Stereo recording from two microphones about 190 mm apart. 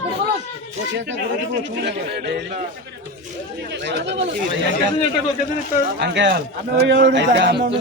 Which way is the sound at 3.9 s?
65° right (ahead or behind).